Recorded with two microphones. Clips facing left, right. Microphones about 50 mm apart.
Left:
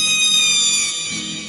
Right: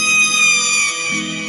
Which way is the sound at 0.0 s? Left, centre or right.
Right.